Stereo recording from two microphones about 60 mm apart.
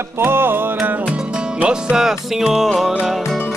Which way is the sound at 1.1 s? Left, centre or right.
Centre.